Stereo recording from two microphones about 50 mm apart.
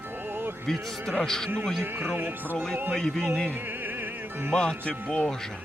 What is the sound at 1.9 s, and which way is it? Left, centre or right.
Speech, right.